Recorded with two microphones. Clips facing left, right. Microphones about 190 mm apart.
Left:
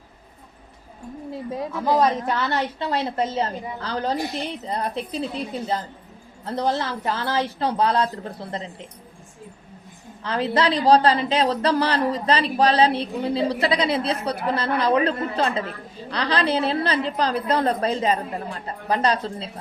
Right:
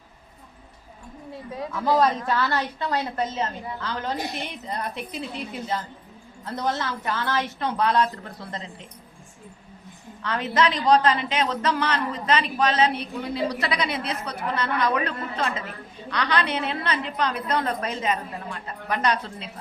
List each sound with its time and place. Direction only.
1.7 s a woman's voice: 20° left (ahead or behind)
6.4 s a woman's voice: 30° left (ahead or behind)
10.2 s a woman's voice: 30° left (ahead or behind)